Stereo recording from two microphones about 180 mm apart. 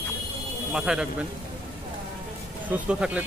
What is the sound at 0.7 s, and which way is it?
Speech, 5° right (ahead or behind).